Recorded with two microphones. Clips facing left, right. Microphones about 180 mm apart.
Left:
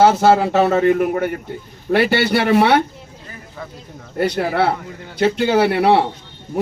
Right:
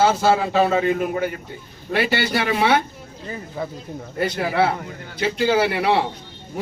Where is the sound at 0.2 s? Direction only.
65° left (ahead or behind).